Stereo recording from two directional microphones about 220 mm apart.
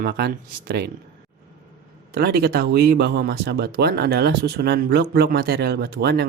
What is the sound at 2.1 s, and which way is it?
Speech, 45° right (ahead or behind).